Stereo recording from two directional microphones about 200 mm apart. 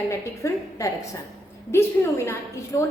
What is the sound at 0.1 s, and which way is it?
A woman's voice, 15° left (ahead or behind).